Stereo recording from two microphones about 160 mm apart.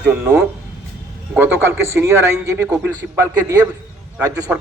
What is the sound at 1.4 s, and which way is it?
A man's voice, 15° right (ahead or behind).